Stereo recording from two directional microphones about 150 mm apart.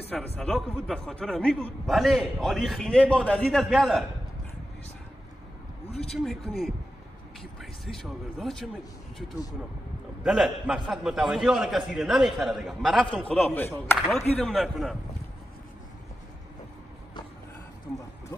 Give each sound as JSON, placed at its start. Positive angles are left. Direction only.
{"t": 0.4, "sound": "a man's voice", "side_deg": 5}
{"t": 5.9, "sound": "speech", "side_deg": 45}
{"t": 6.1, "sound": "a man's voice", "side_deg": 0}
{"t": 7.8, "sound": "a man's voice", "side_deg": 0}
{"t": 10.2, "sound": "a man's voice", "side_deg": -5}
{"t": 14.3, "sound": "a man's voice", "side_deg": 0}